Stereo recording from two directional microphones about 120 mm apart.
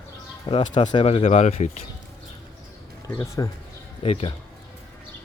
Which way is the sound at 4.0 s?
50° left (ahead or behind).